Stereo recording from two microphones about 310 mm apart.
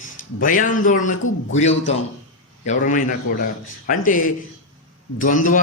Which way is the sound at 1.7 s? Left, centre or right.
Left.